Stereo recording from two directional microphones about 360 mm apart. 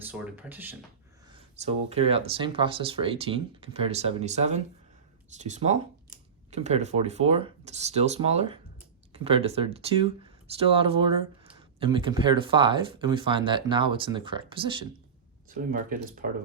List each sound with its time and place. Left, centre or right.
0.0 s speech: centre
1.3 s speech: centre